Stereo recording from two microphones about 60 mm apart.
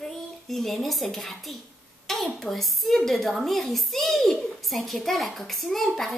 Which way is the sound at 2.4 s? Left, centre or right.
Centre.